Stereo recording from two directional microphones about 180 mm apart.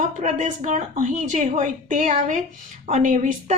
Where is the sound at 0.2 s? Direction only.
45° right (ahead or behind).